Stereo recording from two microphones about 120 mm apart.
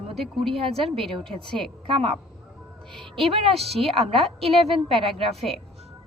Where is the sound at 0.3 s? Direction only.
Centre (ahead or behind).